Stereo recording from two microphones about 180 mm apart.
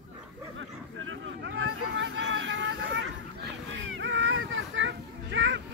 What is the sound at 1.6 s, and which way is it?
Hubbub, 90° right.